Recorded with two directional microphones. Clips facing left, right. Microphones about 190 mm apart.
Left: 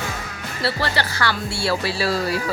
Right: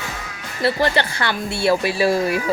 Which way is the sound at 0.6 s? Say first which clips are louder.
Right 5 dB; 20° right (ahead or behind).